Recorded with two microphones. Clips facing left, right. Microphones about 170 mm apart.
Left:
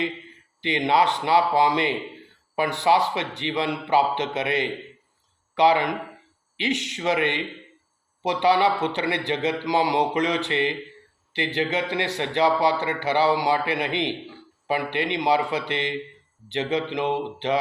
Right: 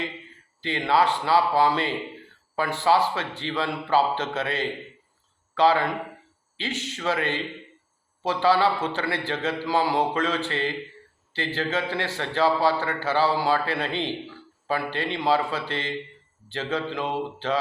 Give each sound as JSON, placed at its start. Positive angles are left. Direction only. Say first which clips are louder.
{"t": 0.6, "sound": "a man's voice", "louder": "left 1 dB", "side_deg": 15}